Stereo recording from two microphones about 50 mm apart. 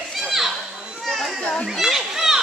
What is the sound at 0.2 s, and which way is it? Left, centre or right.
Children playing, centre.